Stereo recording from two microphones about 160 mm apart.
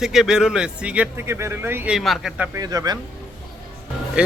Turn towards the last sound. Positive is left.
turn(degrees=-5)  # may be behind; listen again after turning